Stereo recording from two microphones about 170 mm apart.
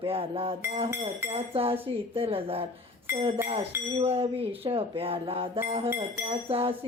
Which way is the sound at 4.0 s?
35° right (ahead or behind).